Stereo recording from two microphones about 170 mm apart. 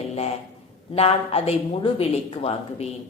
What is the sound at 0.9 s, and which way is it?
Speech, 35° left (ahead or behind).